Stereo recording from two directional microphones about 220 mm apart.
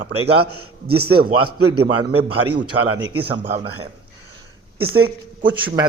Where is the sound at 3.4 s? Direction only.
30° right (ahead or behind).